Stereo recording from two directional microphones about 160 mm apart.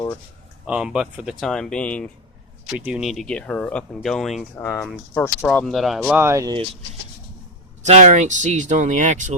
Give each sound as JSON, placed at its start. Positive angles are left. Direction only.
{"t": 0.7, "sound": "speech", "side_deg": -5}
{"t": 2.6, "sound": "speech", "side_deg": -5}
{"t": 4.5, "sound": "speech", "side_deg": 15}
{"t": 5.5, "sound": "speech", "side_deg": 0}
{"t": 6.1, "sound": "speech", "side_deg": -15}
{"t": 7.8, "sound": "speech", "side_deg": -45}